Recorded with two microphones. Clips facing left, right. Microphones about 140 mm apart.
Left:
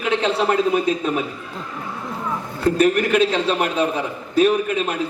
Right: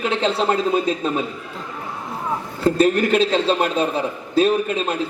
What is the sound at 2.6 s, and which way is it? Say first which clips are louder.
A man's voice: even; 30° right (ahead or behind).